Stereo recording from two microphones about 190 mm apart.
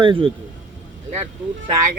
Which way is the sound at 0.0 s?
25° right (ahead or behind).